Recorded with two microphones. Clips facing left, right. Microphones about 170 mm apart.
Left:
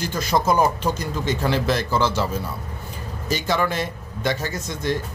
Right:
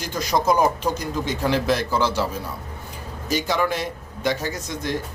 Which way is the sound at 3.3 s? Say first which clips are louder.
Even; 10° right (ahead or behind).